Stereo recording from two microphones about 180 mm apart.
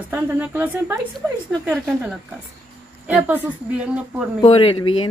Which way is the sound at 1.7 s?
5° right (ahead or behind).